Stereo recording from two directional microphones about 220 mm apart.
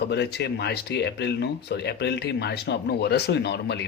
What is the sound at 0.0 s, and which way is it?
Speech, 50° left (ahead or behind).